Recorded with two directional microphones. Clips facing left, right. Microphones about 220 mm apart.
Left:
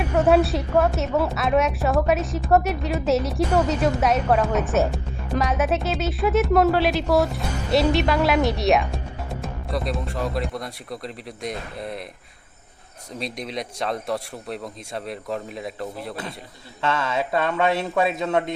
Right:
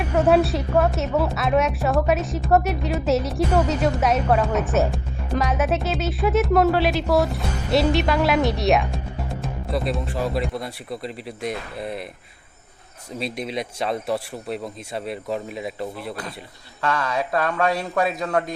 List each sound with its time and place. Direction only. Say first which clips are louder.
0.3 s a woman's voice: even; centre (ahead or behind)
13.1 s a woman's voice: right 3 dB; 5° right (ahead or behind)
16.8 s a man's voice: even; 25° left (ahead or behind)